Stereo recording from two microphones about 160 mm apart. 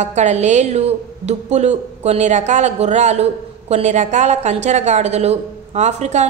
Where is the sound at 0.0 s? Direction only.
45° right (ahead or behind).